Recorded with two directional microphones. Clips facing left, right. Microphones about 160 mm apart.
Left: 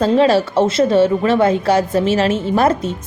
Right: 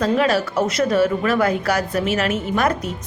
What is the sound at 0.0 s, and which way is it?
A woman's voice, 30° left (ahead or behind).